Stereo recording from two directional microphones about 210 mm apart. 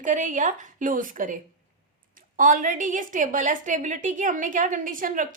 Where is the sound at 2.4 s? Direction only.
40° right (ahead or behind).